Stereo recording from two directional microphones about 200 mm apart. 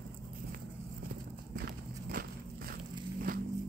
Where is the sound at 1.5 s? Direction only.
50° right (ahead or behind).